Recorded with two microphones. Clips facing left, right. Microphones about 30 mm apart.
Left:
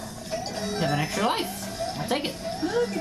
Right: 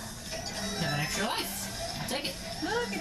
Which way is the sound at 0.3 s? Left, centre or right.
Centre.